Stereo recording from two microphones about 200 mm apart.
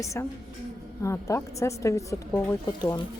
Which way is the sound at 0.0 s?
15° left (ahead or behind).